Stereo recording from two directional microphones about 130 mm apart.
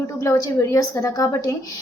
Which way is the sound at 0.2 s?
25° left (ahead or behind).